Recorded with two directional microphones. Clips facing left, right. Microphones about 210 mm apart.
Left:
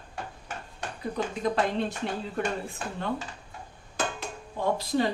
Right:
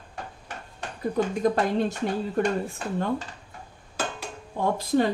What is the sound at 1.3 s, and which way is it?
Speech, 45° right (ahead or behind).